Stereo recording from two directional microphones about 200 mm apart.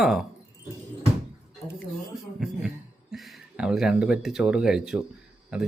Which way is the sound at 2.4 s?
Centre (ahead or behind).